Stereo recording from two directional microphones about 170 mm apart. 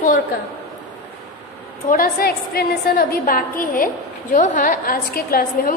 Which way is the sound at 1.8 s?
60° left (ahead or behind).